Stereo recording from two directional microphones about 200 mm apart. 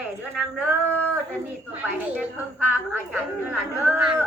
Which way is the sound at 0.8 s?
10° left (ahead or behind).